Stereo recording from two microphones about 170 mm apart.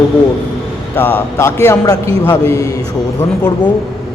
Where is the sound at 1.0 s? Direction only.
15° left (ahead or behind).